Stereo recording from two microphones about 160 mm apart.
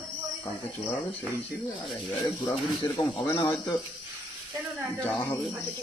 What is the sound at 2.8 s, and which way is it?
Speech, 20° left (ahead or behind).